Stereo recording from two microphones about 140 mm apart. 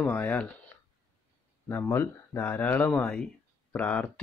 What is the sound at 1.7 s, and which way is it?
Speech, 15° left (ahead or behind).